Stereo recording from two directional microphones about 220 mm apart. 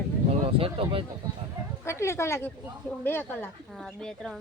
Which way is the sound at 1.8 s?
10° left (ahead or behind).